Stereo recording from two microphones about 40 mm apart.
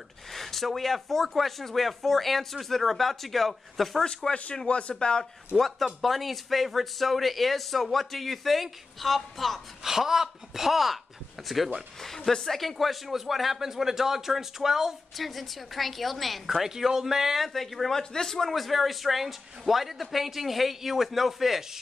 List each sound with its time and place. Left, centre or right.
0.3 s speech: centre
4.0 s speech: centre
5.9 s speech: centre
9.8 s speech: centre
12.0 s speech: centre
18.5 s speech: centre